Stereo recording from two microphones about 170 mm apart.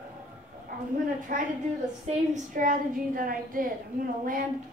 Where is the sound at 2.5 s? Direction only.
55° right (ahead or behind).